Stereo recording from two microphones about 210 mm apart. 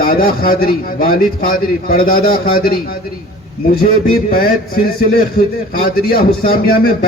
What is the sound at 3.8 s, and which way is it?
A man's voice, 45° left (ahead or behind).